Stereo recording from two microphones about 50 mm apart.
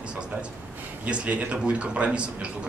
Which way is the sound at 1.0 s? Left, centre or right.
Right.